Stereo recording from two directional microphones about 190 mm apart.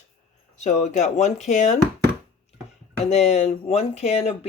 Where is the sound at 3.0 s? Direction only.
35° left (ahead or behind).